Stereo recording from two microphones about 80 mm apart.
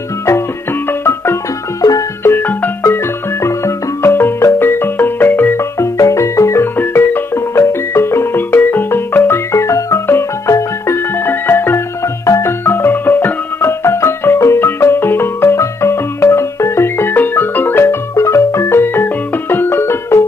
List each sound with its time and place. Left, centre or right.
1.0 s music: left
1.8 s music: left
2.2 s music: left
6.8 s music: left
11.2 s music: left
18.1 s music: left